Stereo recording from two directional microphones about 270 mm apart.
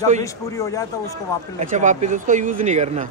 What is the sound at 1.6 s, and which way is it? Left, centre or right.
Speech, right.